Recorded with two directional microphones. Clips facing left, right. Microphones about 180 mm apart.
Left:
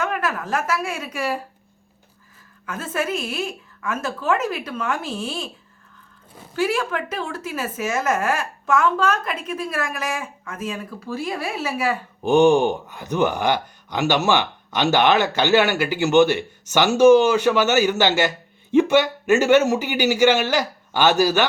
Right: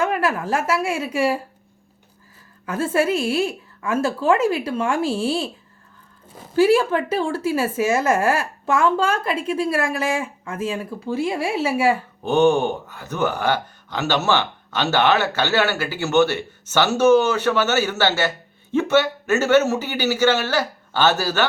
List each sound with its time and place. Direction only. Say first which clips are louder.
0.0 s speech: right 4 dB; 30° right (ahead or behind)
2.6 s speech: right 6 dB; 30° right (ahead or behind)
6.6 s speech: right 7 dB; 30° right (ahead or behind)
12.2 s speech: left 2 dB; 10° left (ahead or behind)